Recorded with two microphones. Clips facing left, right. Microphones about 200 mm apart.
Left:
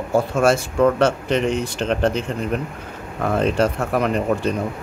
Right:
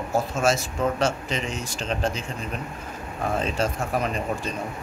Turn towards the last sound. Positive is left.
turn(degrees=65)  # may be behind; listen again after turning